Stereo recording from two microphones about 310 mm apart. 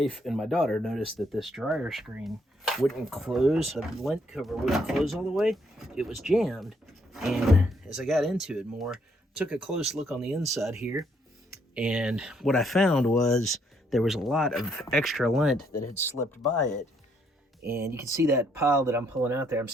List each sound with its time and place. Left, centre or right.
0.0 s speech: centre
15.5 s speech: left
17.7 s speech: centre